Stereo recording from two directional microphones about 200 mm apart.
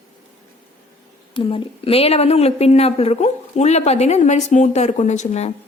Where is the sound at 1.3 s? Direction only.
25° left (ahead or behind).